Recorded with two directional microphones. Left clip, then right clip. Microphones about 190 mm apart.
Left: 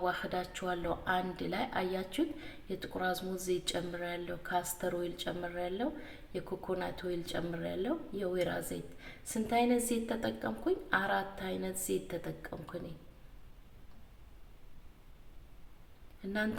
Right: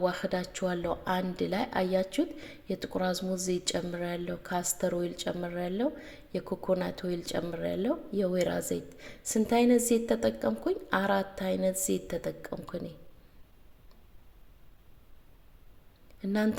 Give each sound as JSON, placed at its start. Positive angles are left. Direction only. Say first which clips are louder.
{"t": 0.0, "sound": "speech", "louder": "right 4 dB", "side_deg": -30}